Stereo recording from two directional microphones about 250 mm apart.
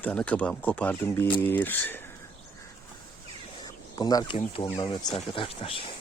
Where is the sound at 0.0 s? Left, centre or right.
Centre.